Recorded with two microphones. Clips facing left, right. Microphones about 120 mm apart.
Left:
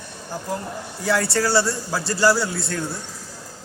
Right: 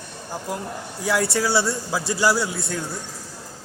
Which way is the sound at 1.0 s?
15° right (ahead or behind).